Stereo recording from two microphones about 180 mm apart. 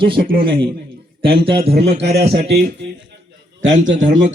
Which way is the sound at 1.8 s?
35° right (ahead or behind).